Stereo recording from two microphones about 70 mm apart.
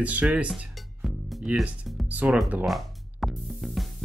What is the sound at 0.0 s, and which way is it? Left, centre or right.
Speech, right.